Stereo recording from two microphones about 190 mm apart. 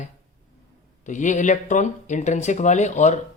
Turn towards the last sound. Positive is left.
turn(degrees=40)  # may be behind; listen again after turning